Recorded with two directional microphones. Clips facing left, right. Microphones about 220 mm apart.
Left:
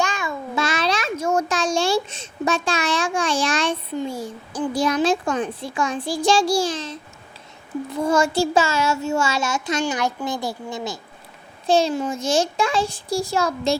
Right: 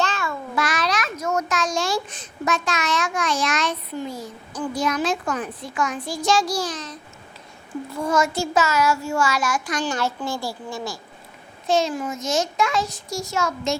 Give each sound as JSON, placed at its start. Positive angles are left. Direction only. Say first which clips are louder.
{"t": 0.0, "sound": "a child's voice", "louder": "left 1 dB", "side_deg": 15}
{"t": 9.8, "sound": "a child's voice", "louder": "left 2 dB", "side_deg": 15}
{"t": 11.6, "sound": "a child's voice", "louder": "left 3 dB", "side_deg": 30}